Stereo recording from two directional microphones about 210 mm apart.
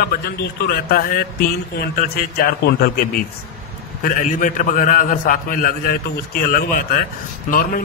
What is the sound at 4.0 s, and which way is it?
A man's voice, 40° left (ahead or behind).